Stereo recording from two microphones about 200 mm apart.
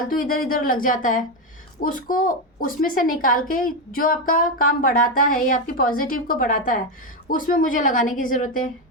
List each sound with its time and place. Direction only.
0.0 s a woman's voice: 45° left (ahead or behind)